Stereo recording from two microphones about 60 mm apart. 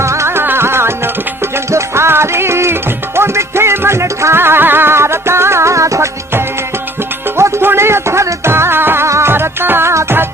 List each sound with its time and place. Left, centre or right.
0.0 s music: right
7.3 s music: right
9.0 s music: right
9.3 s music: right
9.9 s music: right